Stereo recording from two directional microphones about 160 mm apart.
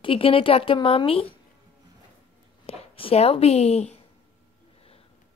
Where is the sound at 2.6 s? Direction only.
40° left (ahead or behind).